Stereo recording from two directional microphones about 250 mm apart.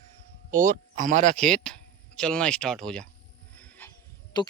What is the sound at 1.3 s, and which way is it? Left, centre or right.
Speech, centre.